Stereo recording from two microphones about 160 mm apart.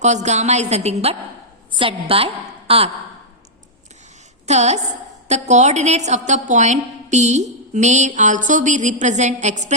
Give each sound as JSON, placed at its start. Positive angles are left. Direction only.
{"t": 0.0, "sound": "a woman's voice", "side_deg": -45}
{"t": 4.4, "sound": "a woman's voice", "side_deg": -45}